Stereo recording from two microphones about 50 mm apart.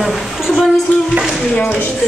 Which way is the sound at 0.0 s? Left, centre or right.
Centre.